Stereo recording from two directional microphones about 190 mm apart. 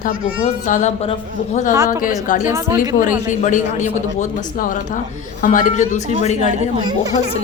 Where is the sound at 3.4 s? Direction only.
40° left (ahead or behind).